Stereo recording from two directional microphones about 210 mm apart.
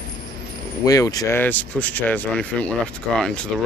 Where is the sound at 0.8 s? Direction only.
15° left (ahead or behind).